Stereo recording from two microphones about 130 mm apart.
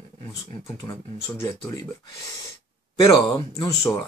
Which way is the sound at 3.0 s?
35° left (ahead or behind).